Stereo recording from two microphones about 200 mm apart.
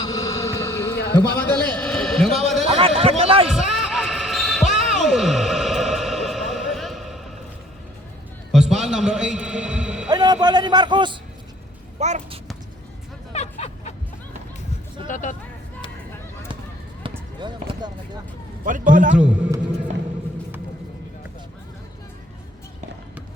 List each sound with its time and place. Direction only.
0.0 s a sound: 20° left (ahead or behind)
1.4 s a man's voice: 5° left (ahead or behind)
2.6 s a sound: 30° right (ahead or behind)
3.5 s music: centre (ahead or behind)
8.5 s a sound: 5° right (ahead or behind)
10.1 s a man's voice: 20° right (ahead or behind)
11.9 s speech: 35° right (ahead or behind)
13.3 s music: 35° left (ahead or behind)
15.0 s speech: 40° left (ahead or behind)
17.0 s basketball bounce: 20° right (ahead or behind)
18.6 s a man's voice: 40° right (ahead or behind)
19.1 s a man's voice: 5° right (ahead or behind)